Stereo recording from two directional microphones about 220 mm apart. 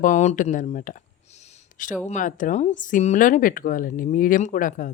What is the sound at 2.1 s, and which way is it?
A woman's voice, 35° left (ahead or behind).